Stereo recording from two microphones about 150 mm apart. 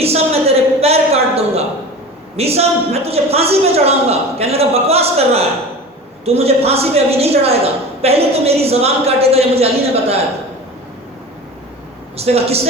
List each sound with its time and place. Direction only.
0.0 s a sound: 45° right (ahead or behind)
2.3 s a woman's voice: 45° right (ahead or behind)
12.1 s a woman's voice: 45° right (ahead or behind)